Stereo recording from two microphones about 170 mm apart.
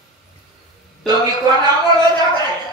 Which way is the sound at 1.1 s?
25° right (ahead or behind).